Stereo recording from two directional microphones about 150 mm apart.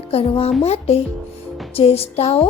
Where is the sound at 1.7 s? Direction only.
40° left (ahead or behind).